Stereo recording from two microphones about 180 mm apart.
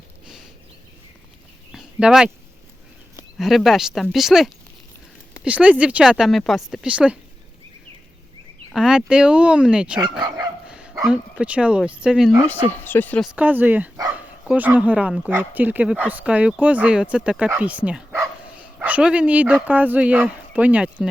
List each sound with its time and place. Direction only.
1.7 s a sound: 5° right (ahead or behind)
3.3 s speech: centre (ahead or behind)
8.7 s speech: 5° right (ahead or behind)
10.0 s speech: 25° right (ahead or behind)
10.7 s dog: 5° right (ahead or behind)
11.0 s speech: 5° right (ahead or behind)
12.8 s speech: 10° left (ahead or behind)
13.2 s speech: 10° right (ahead or behind)